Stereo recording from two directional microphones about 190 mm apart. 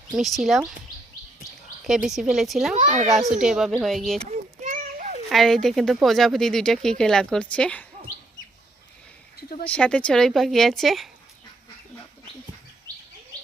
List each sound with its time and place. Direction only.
0.1 s a woman's voice: centre (ahead or behind)
1.8 s a woman's voice: centre (ahead or behind)
2.8 s a child's voice: 40° right (ahead or behind)
3.3 s a woman's voice: centre (ahead or behind)
4.3 s a sound: 40° right (ahead or behind)
5.3 s a woman's voice: centre (ahead or behind)
9.6 s a woman's voice: 5° left (ahead or behind)